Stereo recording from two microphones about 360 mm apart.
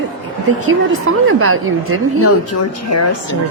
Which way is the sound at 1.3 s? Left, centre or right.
Right.